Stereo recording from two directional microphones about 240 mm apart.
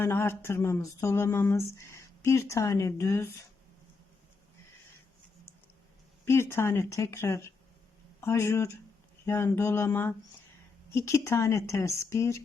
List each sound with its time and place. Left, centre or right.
0.0 s speech: centre
6.2 s speech: centre